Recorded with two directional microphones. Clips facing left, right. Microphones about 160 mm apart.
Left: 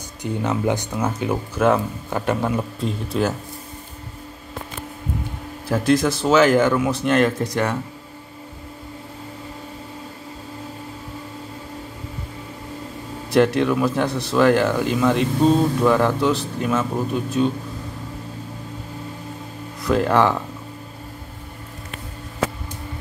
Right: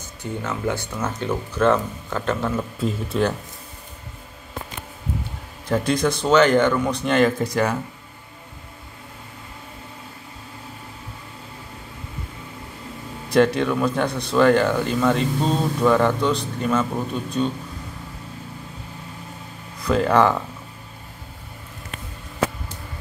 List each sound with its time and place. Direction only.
0.2 s speech: 20° left (ahead or behind)
2.8 s a man's voice: centre (ahead or behind)
5.7 s a man's voice: centre (ahead or behind)
13.3 s a man's voice: centre (ahead or behind)
19.8 s a man's voice: centre (ahead or behind)